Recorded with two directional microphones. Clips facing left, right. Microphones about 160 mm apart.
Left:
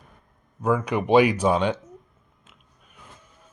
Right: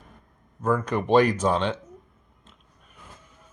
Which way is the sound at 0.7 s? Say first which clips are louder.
Left 1 dB; 10° left (ahead or behind).